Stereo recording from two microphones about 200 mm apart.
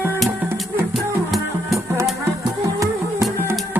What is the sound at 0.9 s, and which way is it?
Music, centre (ahead or behind).